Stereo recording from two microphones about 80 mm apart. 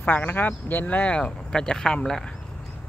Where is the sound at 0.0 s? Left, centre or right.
Left.